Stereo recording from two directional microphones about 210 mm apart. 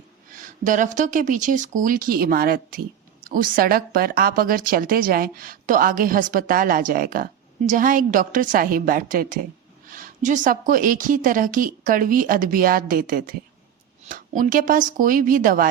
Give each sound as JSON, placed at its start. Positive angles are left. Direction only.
{"t": 0.3, "sound": "speech", "side_deg": -40}